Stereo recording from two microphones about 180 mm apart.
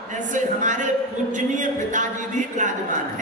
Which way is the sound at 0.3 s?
45° right (ahead or behind).